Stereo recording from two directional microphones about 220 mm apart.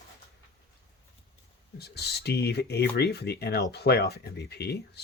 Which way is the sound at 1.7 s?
45° left (ahead or behind).